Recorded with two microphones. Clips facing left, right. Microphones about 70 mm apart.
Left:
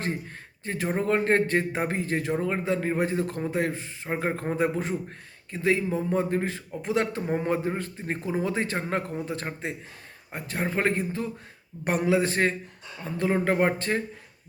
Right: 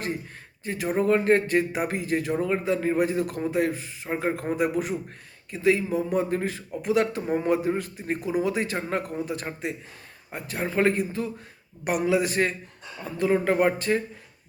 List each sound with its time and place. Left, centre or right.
0.6 s a man's voice: left